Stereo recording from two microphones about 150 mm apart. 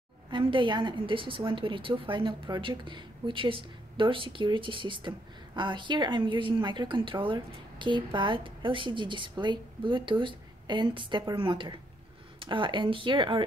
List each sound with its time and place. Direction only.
0.3 s speech: 35° right (ahead or behind)